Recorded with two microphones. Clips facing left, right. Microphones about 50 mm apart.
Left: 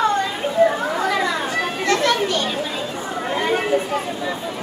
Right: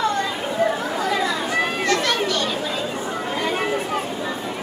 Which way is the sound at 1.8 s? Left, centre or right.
Left.